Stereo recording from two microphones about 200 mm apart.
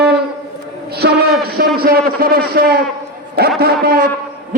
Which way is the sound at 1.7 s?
50° right (ahead or behind).